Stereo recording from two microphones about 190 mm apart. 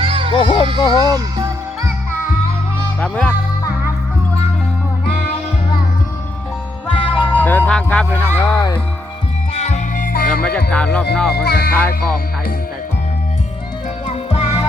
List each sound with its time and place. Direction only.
0.0 s children playing: 30° right (ahead or behind)
0.3 s a sound: 25° left (ahead or behind)
0.8 s speech: 25° left (ahead or behind)
3.0 s music: 5° left (ahead or behind)
6.9 s music: 25° left (ahead or behind)
7.3 s music: 10° left (ahead or behind)
9.6 s music: 35° left (ahead or behind)
10.7 s speech: 5° left (ahead or behind)
11.4 s speech: 55° left (ahead or behind)
11.8 s music: 10° left (ahead or behind)
14.1 s music: 30° left (ahead or behind)